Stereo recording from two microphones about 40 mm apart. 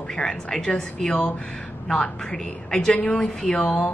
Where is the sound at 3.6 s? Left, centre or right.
Left.